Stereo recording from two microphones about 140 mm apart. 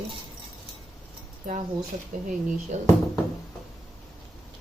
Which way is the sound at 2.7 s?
55° right (ahead or behind).